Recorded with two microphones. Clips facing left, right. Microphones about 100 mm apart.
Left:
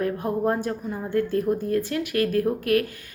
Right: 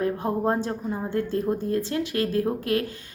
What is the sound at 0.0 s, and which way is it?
A woman's voice, 25° right (ahead or behind).